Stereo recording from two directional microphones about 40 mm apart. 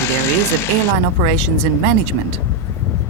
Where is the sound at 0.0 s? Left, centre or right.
Left.